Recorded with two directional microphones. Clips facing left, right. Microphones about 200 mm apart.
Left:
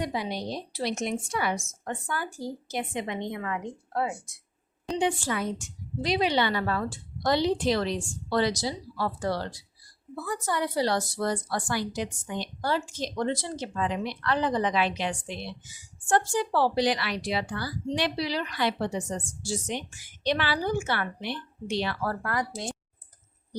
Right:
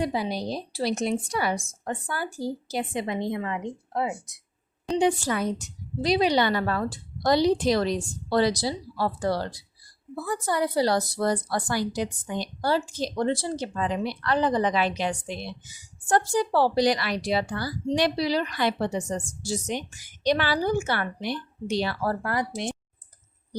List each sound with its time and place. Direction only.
0.0 s speech: 35° right (ahead or behind)
4.9 s speech: 40° right (ahead or behind); by 22.7 s 25° right (ahead or behind)